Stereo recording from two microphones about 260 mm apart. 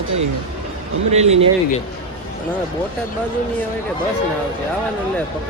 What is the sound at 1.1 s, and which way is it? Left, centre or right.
Speech, right.